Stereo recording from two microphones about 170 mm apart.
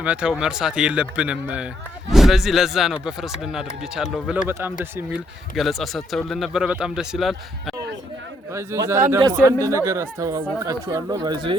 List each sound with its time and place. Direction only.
0.0 s speech: 5° right (ahead or behind)
5.5 s speech: centre (ahead or behind)
8.5 s speech: 15° right (ahead or behind)